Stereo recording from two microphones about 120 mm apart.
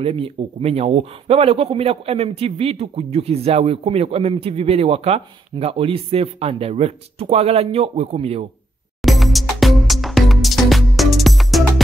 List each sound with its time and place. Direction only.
0.0 s a man's voice: 50° right (ahead or behind)
9.0 s music: centre (ahead or behind)